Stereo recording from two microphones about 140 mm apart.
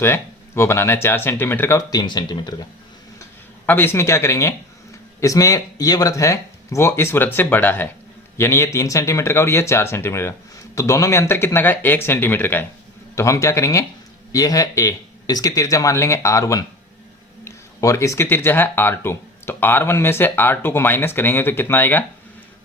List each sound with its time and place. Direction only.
0.0 s speech: 20° left (ahead or behind)
3.7 s speech: 15° left (ahead or behind)